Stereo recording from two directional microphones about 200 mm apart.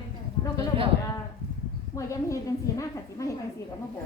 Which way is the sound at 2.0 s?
15° left (ahead or behind).